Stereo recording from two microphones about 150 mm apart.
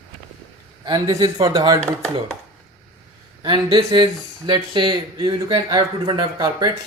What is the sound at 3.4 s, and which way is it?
Speech, 30° right (ahead or behind).